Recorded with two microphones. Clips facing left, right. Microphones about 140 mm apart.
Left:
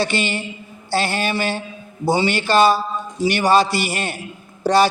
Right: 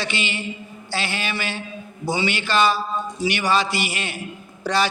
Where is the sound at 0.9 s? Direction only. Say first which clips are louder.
Left 7 dB; 45° left (ahead or behind).